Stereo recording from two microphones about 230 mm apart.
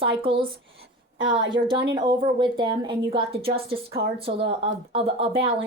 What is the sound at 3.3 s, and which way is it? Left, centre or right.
Speech, right.